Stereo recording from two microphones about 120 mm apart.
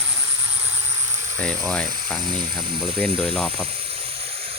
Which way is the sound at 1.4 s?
5° left (ahead or behind).